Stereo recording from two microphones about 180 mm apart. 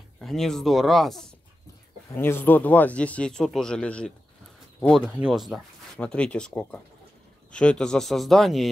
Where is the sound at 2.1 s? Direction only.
10° left (ahead or behind).